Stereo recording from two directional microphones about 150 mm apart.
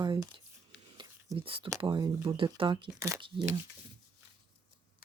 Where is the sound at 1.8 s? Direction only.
30° right (ahead or behind).